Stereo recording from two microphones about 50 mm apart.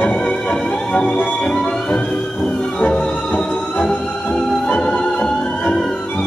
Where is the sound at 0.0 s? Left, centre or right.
Centre.